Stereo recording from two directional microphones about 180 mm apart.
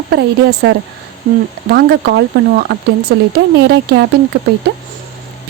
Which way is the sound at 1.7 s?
65° right (ahead or behind).